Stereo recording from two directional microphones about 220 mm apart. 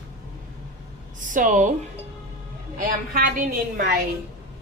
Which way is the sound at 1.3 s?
35° right (ahead or behind).